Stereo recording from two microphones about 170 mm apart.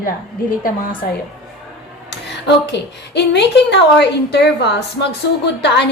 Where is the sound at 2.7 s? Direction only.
80° left.